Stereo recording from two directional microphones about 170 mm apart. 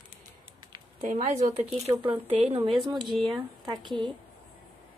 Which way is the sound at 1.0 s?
40° right (ahead or behind).